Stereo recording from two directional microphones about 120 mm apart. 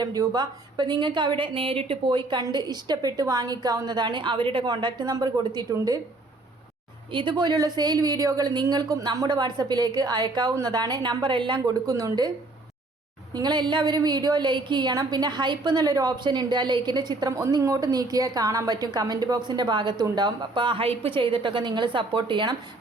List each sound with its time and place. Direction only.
0.0 s a woman's voice: 30° right (ahead or behind)
7.1 s a woman's voice: 40° right (ahead or behind)
11.6 s speech: 30° right (ahead or behind)
13.3 s a woman's voice: 35° right (ahead or behind)